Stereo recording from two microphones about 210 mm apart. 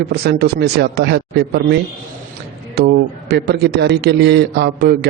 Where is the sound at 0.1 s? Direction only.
50° right (ahead or behind).